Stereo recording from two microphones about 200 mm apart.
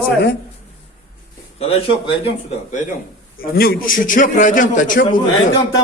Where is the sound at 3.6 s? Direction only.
45° left (ahead or behind).